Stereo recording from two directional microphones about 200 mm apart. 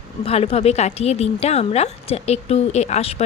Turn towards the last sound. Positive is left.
turn(degrees=30)  # may be behind; listen again after turning